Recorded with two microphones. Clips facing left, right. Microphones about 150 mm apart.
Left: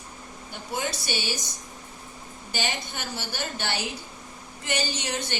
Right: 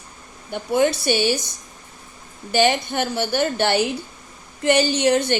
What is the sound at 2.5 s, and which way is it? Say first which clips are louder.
A woman's voice: right 13 dB; 65° right (ahead or behind).